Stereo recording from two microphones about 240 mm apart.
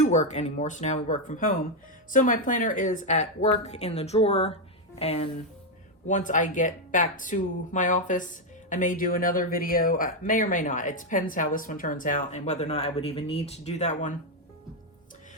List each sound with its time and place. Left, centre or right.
0.0 s a woman's voice: left